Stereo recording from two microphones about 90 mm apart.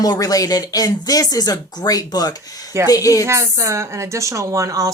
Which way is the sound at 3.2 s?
30° right (ahead or behind).